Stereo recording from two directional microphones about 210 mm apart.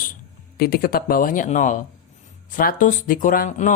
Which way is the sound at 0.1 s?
45° left (ahead or behind).